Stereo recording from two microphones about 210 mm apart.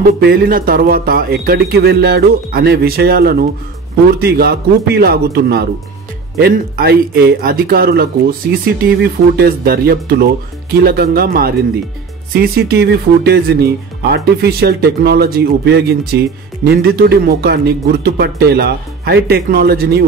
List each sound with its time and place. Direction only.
0.0 s a man's voice: 45° right (ahead or behind)